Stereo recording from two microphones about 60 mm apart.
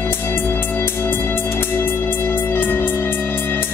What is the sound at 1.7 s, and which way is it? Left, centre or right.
Music, left.